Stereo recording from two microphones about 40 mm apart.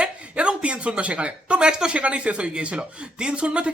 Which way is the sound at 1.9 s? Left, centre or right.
Right.